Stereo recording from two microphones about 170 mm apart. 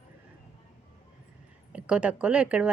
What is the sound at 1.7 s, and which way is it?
Speech, 5° right (ahead or behind).